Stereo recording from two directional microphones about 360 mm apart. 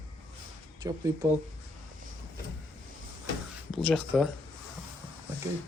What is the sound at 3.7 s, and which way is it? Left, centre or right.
Speech, centre.